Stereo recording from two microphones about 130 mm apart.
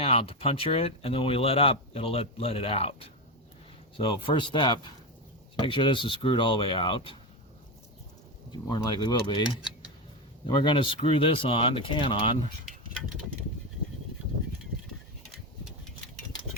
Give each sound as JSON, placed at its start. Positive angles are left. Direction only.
{"t": 0.0, "sound": "speech", "side_deg": 50}
{"t": 8.7, "sound": "speech", "side_deg": 35}
{"t": 15.3, "sound": "a sound", "side_deg": 0}